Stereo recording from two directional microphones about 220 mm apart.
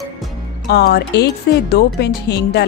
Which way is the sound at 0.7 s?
50° left (ahead or behind).